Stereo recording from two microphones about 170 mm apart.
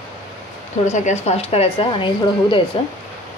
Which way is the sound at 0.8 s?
45° left (ahead or behind).